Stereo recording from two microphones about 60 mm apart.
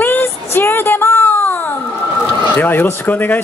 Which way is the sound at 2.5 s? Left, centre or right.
Left.